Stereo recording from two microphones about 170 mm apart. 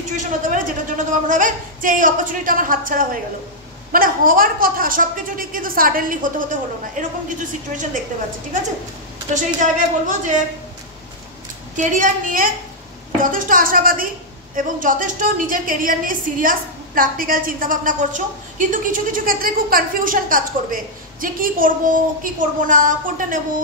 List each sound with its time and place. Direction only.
0.1 s a woman's voice: 50° right (ahead or behind)
9.3 s a woman's voice: 45° right (ahead or behind)
11.7 s a woman's voice: 50° right (ahead or behind)